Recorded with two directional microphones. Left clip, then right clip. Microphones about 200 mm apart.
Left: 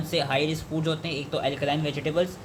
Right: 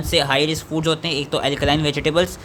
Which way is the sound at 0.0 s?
30° right (ahead or behind).